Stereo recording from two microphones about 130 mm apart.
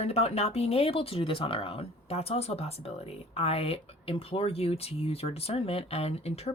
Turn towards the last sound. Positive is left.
turn(degrees=55)  # may be behind; listen again after turning